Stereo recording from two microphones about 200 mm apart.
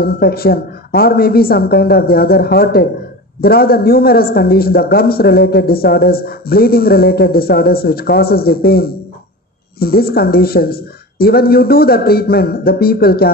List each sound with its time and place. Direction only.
0.0 s a man's voice: 50° left (ahead or behind)